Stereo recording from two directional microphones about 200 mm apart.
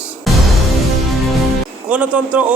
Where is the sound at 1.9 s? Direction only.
5° right (ahead or behind).